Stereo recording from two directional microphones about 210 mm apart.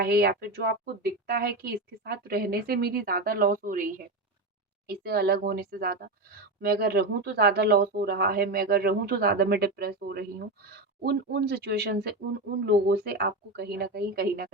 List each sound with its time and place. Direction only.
0.0 s speech: 50° right (ahead or behind)